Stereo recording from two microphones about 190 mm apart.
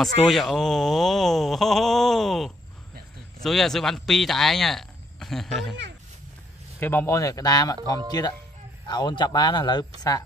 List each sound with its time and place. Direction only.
0.0 s speech: centre (ahead or behind)
6.8 s speech: 10° left (ahead or behind)